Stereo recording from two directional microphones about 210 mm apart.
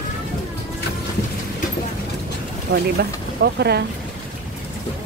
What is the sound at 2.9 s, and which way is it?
Speech, 50° right (ahead or behind).